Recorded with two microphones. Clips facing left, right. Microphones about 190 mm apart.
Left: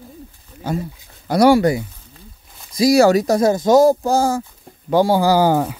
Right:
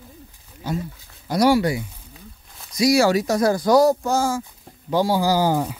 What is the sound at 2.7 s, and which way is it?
Speech, 35° left (ahead or behind).